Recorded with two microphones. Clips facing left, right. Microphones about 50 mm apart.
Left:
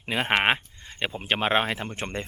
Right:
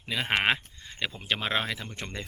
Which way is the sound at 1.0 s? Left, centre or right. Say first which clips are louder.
Left 4 dB; left.